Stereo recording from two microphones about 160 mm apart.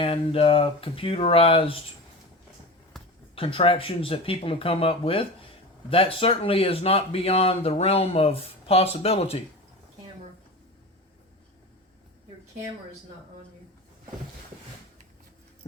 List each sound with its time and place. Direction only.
0.0 s speech: 35° left (ahead or behind)
3.3 s speech: 35° left (ahead or behind)